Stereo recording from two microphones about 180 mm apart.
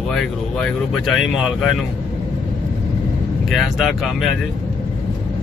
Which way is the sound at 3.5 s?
Centre (ahead or behind).